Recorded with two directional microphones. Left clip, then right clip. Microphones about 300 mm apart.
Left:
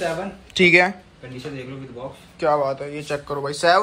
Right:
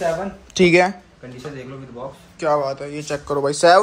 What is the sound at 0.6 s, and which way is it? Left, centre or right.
Speech, centre.